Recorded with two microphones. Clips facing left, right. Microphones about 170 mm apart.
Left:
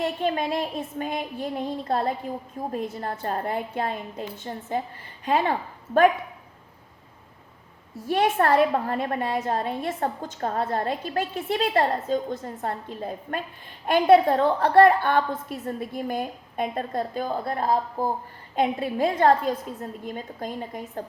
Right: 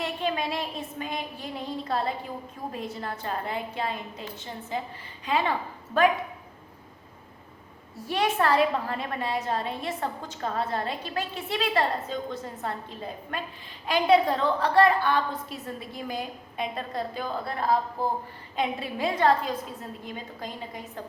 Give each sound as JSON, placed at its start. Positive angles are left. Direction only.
{"t": 0.0, "sound": "a woman's voice", "side_deg": 50}
{"t": 8.0, "sound": "a woman's voice", "side_deg": 50}